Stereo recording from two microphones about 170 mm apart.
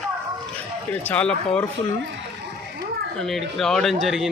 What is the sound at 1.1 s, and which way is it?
Speech, 5° left (ahead or behind).